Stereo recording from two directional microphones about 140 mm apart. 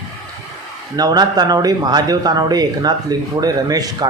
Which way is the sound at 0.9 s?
30° right (ahead or behind).